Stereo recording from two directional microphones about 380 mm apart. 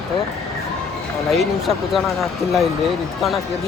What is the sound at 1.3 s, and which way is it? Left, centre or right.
Speech, centre.